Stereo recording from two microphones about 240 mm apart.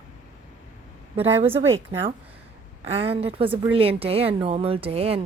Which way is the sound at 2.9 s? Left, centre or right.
Right.